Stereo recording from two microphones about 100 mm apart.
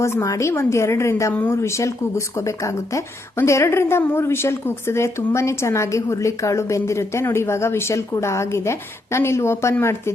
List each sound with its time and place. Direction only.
0.0 s speech: 30° left (ahead or behind)